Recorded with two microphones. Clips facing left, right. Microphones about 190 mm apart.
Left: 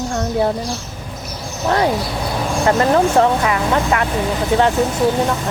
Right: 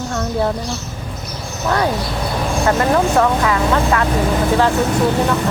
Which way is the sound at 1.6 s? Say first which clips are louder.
Left 1 dB; 25° left (ahead or behind).